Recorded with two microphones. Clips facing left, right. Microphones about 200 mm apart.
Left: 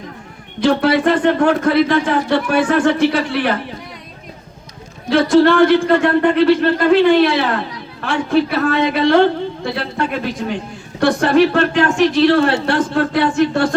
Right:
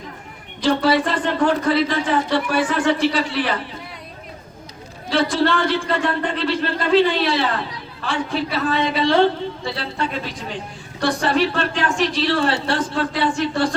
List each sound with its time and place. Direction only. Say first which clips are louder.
0.8 s speech: left 5 dB; 60° left (ahead or behind)
5.0 s speech: left 8 dB; 60° left (ahead or behind)